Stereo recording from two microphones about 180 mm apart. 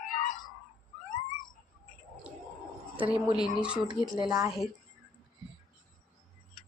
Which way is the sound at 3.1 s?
25° left (ahead or behind).